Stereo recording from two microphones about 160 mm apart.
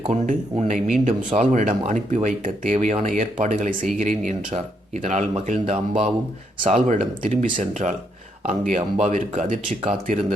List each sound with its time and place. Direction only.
0.0 s speech: 40° right (ahead or behind)